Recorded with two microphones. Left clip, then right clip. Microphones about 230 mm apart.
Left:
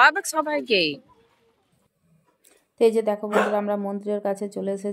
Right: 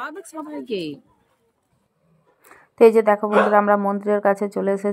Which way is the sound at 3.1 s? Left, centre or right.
Centre.